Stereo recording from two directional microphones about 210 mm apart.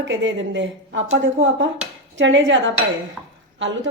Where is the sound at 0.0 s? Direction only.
60° right (ahead or behind).